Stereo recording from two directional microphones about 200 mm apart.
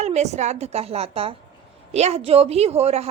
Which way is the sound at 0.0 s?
35° right (ahead or behind).